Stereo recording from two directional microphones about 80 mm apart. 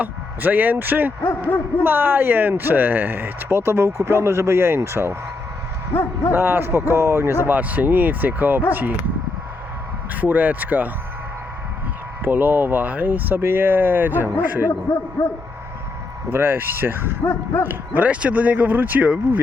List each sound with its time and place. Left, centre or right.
0.0 s speech: right
1.2 s a sound: left
1.8 s speech: right
5.9 s a sound: left
6.3 s speech: right
10.2 s speech: right
12.2 s speech: right
14.7 s speech: left
16.3 s speech: right
17.2 s a sound: left
17.7 s speech: right